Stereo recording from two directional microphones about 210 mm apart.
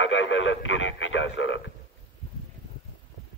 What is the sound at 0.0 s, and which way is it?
Radio, 65° left (ahead or behind).